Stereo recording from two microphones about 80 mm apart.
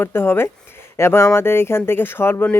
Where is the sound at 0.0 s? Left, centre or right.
Left.